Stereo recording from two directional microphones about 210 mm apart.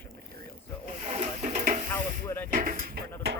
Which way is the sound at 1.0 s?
30° right (ahead or behind).